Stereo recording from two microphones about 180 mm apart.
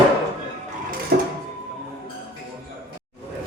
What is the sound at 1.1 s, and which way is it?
Printer, 60° right (ahead or behind).